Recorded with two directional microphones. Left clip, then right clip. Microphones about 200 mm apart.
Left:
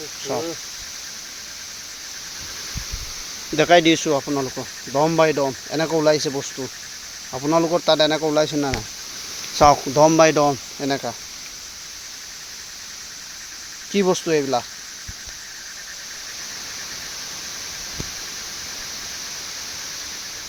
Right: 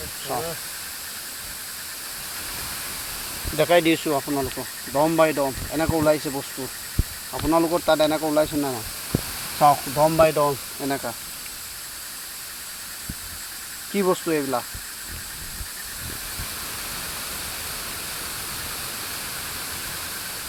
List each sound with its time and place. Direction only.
3.6 s speech: 45° left (ahead or behind)
7.5 s speech: 40° left (ahead or behind)
9.6 s speech: 60° left (ahead or behind)
10.8 s speech: 40° left (ahead or behind)
13.9 s speech: 40° left (ahead or behind)